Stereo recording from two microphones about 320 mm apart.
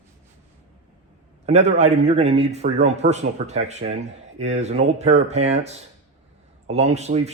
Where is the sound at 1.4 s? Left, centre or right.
Right.